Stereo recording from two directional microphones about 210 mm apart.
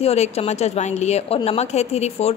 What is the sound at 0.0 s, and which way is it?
A woman's voice, 30° left (ahead or behind).